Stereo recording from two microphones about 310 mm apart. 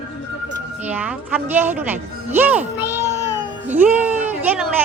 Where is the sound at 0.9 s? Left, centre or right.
Centre.